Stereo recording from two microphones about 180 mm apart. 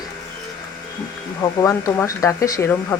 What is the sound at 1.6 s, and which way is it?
Speech, 15° left (ahead or behind).